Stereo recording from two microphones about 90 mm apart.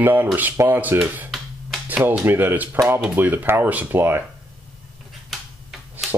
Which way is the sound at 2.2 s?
25° right (ahead or behind).